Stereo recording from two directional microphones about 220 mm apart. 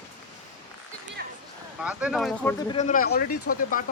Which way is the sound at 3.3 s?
90° left.